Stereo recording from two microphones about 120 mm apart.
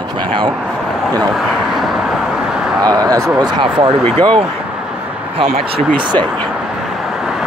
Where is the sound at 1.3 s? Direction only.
Centre (ahead or behind).